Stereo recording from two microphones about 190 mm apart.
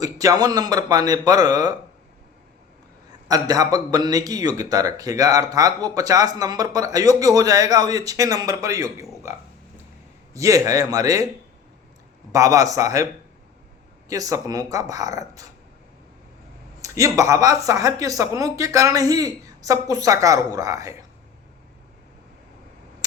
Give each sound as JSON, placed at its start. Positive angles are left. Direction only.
{"t": 0.0, "sound": "a man's voice", "side_deg": -20}
{"t": 3.2, "sound": "a man's voice", "side_deg": -20}
{"t": 10.3, "sound": "speech", "side_deg": -15}
{"t": 12.3, "sound": "speech", "side_deg": -15}
{"t": 14.1, "sound": "a man's voice", "side_deg": -20}
{"t": 16.8, "sound": "speech", "side_deg": -15}